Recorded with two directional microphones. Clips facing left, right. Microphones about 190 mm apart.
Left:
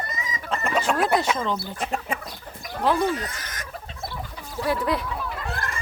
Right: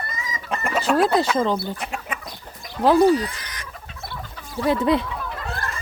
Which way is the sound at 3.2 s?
45° left (ahead or behind).